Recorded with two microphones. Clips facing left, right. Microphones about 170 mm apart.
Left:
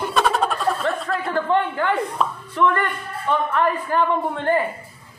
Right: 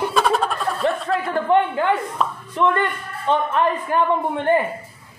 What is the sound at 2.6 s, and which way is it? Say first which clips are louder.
Speech: right 1 dB; 20° right (ahead or behind).